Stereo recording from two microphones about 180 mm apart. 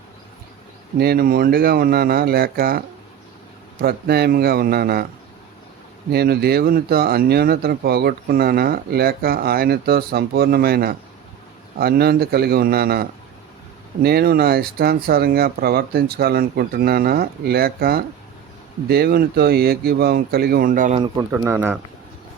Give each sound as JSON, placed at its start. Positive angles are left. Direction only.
{"t": 0.9, "sound": "speech", "side_deg": -60}
{"t": 6.1, "sound": "speech", "side_deg": -60}
{"t": 21.0, "sound": "speech", "side_deg": -20}